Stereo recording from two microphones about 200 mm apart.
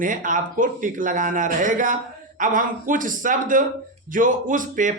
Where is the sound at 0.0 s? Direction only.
40° right (ahead or behind).